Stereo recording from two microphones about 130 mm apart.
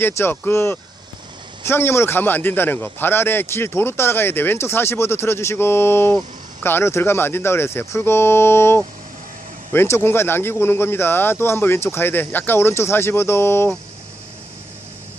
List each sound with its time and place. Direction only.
0.2 s a man's voice: 20° left (ahead or behind)